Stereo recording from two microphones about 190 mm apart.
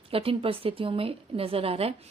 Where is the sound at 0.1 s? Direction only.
30° right (ahead or behind).